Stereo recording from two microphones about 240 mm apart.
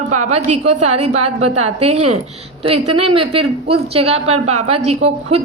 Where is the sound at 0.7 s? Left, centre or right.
Right.